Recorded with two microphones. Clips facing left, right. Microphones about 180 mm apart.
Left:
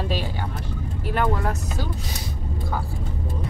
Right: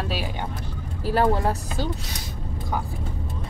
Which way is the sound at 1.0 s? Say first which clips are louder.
Right 3 dB; 35° right (ahead or behind).